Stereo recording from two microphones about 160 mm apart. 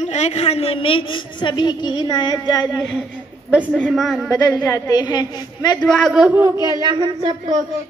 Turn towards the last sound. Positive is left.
turn(degrees=-30)  # may be behind; listen again after turning